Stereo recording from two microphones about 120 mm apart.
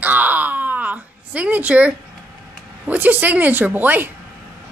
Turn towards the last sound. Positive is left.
turn(degrees=-15)  # may be behind; listen again after turning